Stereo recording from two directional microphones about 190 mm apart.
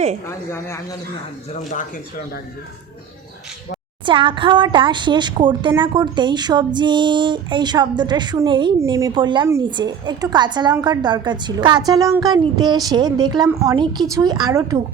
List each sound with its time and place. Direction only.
0.3 s speech: 15° left (ahead or behind)
1.5 s speech: 40° left (ahead or behind)
4.0 s a woman's voice: 25° right (ahead or behind)